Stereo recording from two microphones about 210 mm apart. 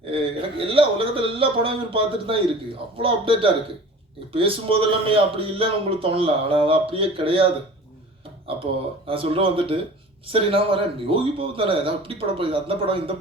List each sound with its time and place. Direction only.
0.0 s speech: 25° right (ahead or behind)
9.0 s speech: 25° right (ahead or behind)